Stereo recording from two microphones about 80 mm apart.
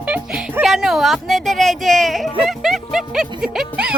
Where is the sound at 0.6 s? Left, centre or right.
Centre.